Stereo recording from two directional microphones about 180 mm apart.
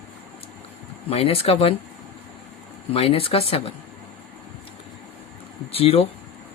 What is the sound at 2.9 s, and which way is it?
Speech, 30° left (ahead or behind).